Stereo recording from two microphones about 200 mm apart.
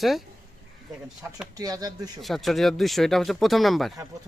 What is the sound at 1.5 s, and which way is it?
Speech, 20° right (ahead or behind).